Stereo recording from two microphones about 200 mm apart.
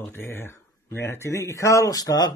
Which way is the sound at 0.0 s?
10° left (ahead or behind).